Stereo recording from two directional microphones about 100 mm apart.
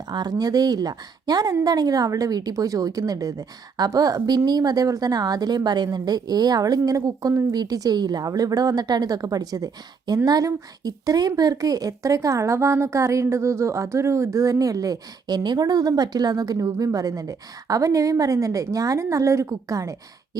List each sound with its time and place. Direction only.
0.1 s a woman's voice: 45° right (ahead or behind)